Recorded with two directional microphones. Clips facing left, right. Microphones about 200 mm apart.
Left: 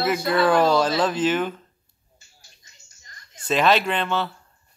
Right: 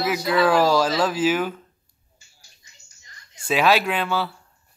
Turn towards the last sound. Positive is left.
turn(degrees=-5)  # may be behind; listen again after turning